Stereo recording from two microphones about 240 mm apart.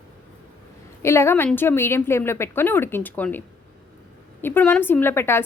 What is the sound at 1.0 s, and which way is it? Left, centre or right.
A woman's voice, centre.